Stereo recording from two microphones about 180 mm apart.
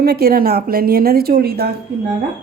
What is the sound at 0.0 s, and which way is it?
Speech, 60° right (ahead or behind).